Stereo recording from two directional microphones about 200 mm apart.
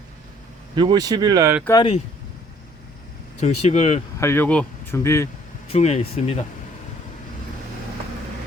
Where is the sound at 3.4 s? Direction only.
35° left (ahead or behind).